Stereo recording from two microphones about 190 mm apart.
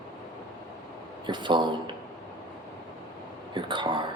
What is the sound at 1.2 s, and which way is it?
Speech, 25° right (ahead or behind).